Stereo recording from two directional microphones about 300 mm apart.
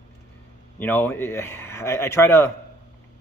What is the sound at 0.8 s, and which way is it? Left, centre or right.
Speech, centre.